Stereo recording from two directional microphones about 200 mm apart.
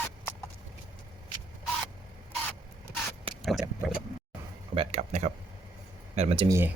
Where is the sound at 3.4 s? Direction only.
Centre (ahead or behind).